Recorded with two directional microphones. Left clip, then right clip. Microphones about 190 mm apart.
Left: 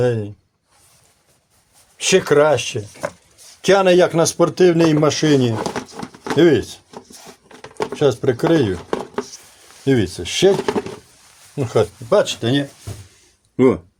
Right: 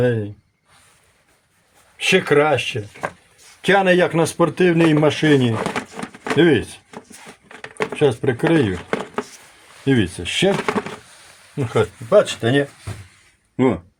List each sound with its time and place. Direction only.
0.0 s speech: 5° left (ahead or behind)
2.0 s speech: 10° left (ahead or behind)
7.9 s speech: 15° left (ahead or behind)